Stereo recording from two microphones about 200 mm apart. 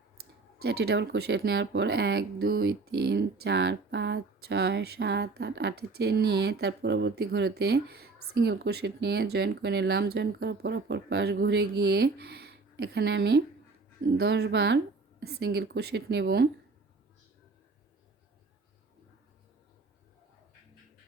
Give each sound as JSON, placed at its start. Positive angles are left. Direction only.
{"t": 0.2, "sound": "speech", "side_deg": -55}